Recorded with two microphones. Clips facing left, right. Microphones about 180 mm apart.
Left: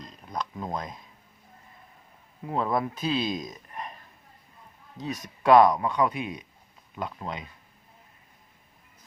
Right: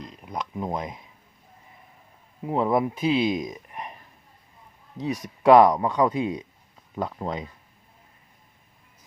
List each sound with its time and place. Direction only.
0.3 s speech: 15° right (ahead or behind)
2.4 s speech: 20° right (ahead or behind)
3.4 s a sound: 15° right (ahead or behind)
5.5 s speech: 25° right (ahead or behind)